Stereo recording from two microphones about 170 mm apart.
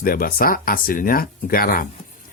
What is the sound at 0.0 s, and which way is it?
Speech, 55° left (ahead or behind).